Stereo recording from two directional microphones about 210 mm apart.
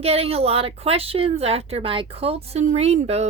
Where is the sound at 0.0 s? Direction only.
30° right (ahead or behind).